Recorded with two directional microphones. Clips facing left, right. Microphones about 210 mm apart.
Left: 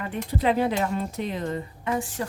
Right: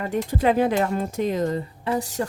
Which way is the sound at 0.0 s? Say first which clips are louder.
Right 4 dB; 45° right (ahead or behind).